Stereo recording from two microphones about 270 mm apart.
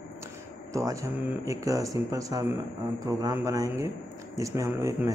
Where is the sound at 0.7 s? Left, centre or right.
Centre.